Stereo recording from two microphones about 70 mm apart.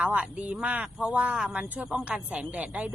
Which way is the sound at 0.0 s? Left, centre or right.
Centre.